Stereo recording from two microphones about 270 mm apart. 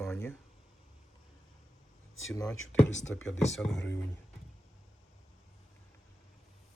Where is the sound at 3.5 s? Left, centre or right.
Centre.